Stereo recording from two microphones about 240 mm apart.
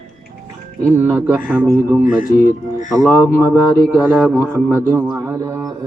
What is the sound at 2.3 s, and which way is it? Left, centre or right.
Speech, left.